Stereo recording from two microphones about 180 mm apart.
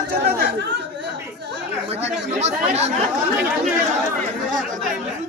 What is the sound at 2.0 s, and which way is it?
Chatter, 40° right (ahead or behind).